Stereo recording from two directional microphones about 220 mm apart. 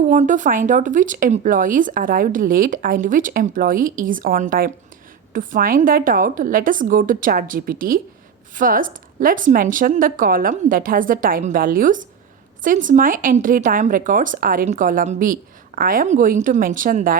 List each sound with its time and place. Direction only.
0.1 s speech: 35° right (ahead or behind)